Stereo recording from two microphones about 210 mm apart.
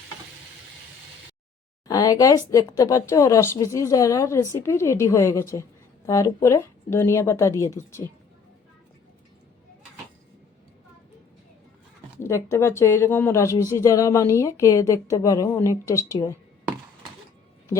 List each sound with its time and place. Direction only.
1.9 s a woman's voice: 15° left (ahead or behind)
12.2 s a woman's voice: 15° left (ahead or behind)